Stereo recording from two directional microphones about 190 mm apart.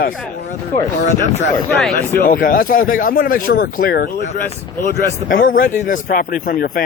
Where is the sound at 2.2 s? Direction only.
45° left (ahead or behind).